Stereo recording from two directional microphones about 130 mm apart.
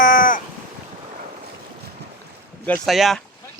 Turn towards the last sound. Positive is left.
turn(degrees=0)  # may be behind; listen again after turning